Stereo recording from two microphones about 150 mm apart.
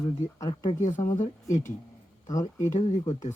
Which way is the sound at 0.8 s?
55° left (ahead or behind).